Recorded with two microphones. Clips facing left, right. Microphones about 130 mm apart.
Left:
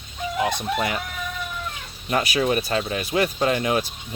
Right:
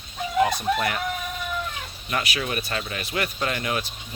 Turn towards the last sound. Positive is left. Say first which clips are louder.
# left 6 dB
turn(degrees=25)  # may be behind; listen again after turning